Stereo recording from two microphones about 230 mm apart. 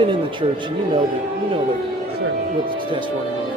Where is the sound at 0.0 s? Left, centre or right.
Right.